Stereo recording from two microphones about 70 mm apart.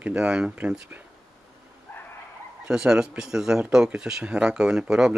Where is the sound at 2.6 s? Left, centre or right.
Centre.